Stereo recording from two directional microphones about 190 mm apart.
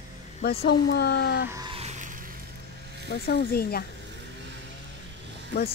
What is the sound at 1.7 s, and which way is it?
Music, 35° right (ahead or behind).